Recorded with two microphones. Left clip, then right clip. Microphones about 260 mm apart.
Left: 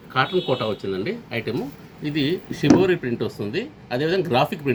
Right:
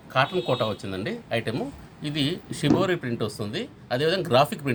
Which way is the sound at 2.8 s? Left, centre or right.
Right.